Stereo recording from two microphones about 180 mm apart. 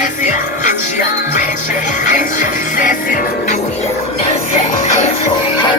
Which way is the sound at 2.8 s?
50° left (ahead or behind).